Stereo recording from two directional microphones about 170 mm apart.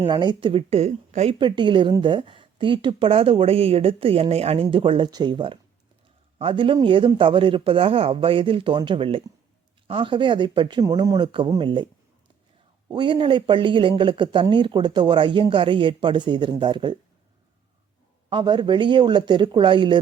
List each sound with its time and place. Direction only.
0.0 s speech: 25° right (ahead or behind)
12.9 s speech: 25° right (ahead or behind)
18.3 s speech: 25° right (ahead or behind)